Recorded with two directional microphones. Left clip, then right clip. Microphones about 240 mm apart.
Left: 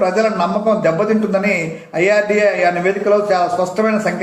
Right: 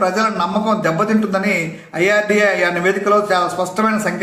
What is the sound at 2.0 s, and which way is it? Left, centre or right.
A man's voice, centre.